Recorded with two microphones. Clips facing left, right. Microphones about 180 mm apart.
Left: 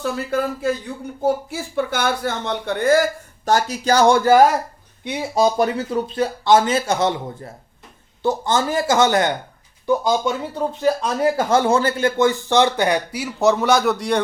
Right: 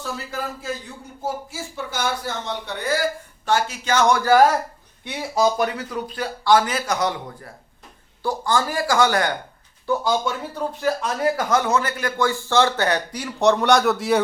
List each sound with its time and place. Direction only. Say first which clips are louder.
0.0 s a man's voice: left 8 dB; 60° left (ahead or behind); by 14.2 s 5° right (ahead or behind)